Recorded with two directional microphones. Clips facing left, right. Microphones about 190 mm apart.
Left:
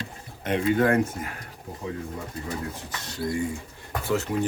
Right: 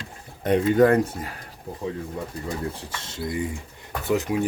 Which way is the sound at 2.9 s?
25° right (ahead or behind).